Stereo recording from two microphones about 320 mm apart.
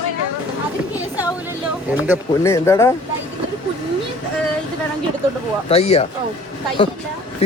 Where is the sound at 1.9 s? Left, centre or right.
Centre.